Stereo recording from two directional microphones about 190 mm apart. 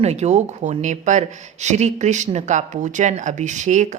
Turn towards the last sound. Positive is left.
turn(degrees=-40)  # may be behind; listen again after turning